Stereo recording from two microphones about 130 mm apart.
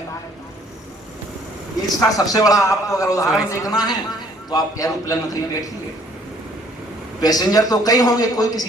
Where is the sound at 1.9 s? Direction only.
25° left (ahead or behind).